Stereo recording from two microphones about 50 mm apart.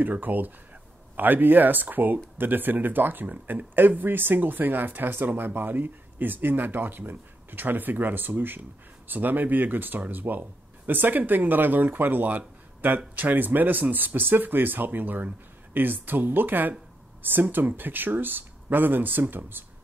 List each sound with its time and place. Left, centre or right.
0.0 s speech: right